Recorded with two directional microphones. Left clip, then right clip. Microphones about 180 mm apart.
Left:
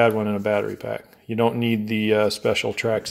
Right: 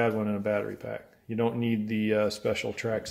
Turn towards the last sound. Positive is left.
turn(degrees=30)  # may be behind; listen again after turning